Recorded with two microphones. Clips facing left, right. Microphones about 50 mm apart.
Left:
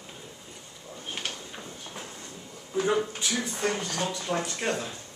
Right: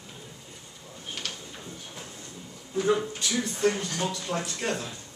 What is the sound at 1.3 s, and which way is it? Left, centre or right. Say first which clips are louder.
Drawer open or close: left 1 dB; centre.